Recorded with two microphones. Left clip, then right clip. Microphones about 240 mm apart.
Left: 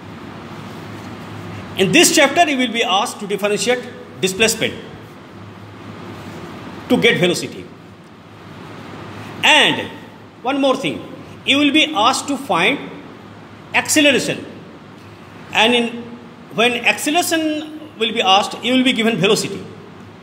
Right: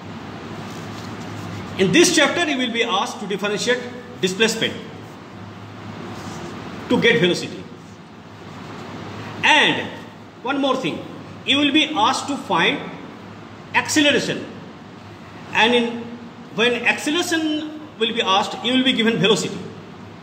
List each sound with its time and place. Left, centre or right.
1.8 s a man's voice: left
6.9 s a man's voice: left
9.4 s a sound: left
10.4 s a man's voice: left
15.5 s a man's voice: left